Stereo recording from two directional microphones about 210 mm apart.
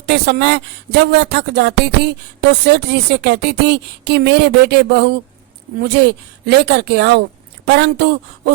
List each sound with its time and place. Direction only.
0.0 s speech: 55° right (ahead or behind)